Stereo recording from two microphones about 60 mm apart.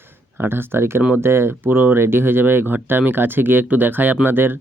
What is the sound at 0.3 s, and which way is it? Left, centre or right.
Speech, right.